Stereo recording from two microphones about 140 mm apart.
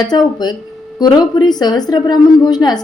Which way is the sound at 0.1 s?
30° left (ahead or behind).